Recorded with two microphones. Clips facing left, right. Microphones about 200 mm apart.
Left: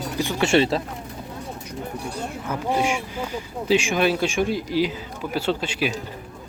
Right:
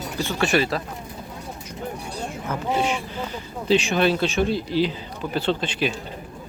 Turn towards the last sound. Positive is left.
turn(degrees=10)  # may be behind; listen again after turning